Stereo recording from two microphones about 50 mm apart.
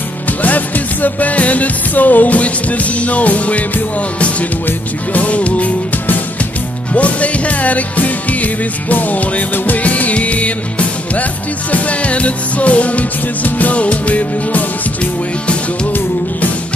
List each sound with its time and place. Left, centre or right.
0.4 s music: left